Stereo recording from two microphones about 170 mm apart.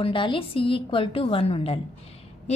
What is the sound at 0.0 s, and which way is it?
A woman's voice, 30° left (ahead or behind).